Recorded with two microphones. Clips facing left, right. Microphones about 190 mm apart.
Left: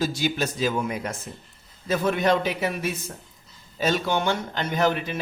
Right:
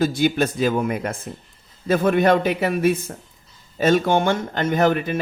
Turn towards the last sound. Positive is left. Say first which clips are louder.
# right 5 dB
turn(degrees=-50)  # may be behind; listen again after turning